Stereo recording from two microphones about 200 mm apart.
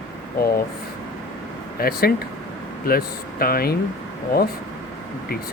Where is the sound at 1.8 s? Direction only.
50° left (ahead or behind).